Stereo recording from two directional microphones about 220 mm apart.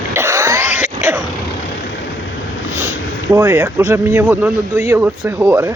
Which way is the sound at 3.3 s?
10° right (ahead or behind).